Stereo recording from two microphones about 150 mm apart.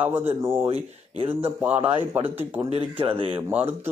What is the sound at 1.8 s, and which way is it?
A man's voice, 40° right (ahead or behind).